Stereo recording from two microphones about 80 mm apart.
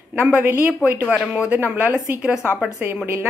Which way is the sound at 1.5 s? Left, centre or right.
Right.